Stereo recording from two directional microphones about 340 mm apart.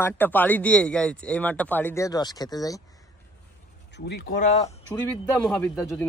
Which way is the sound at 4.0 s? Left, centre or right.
Left.